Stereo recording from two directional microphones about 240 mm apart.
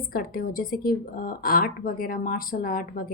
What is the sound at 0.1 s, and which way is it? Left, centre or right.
Speech, left.